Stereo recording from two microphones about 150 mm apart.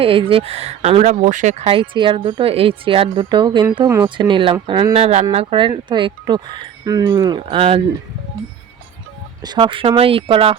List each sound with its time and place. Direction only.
0.0 s speech: 35° right (ahead or behind)
3.8 s speech: 20° right (ahead or behind)
4.2 s speech: 35° right (ahead or behind)
9.4 s speech: 30° right (ahead or behind)